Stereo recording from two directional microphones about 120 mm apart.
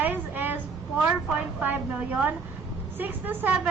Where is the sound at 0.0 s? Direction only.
15° right (ahead or behind).